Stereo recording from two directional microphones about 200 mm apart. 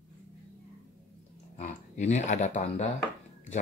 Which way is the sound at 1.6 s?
35° left (ahead or behind).